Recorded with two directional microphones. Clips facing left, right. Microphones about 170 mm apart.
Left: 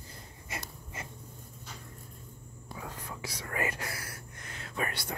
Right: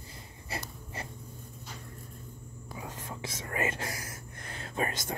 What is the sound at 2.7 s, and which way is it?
Whispering, 20° right (ahead or behind).